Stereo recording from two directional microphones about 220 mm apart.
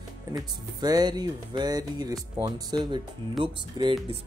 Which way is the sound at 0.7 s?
20° right (ahead or behind).